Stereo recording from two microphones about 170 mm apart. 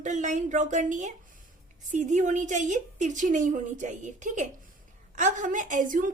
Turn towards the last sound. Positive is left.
turn(degrees=-50)  # may be behind; listen again after turning